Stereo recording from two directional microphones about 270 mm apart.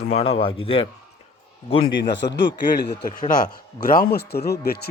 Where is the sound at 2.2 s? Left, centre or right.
Left.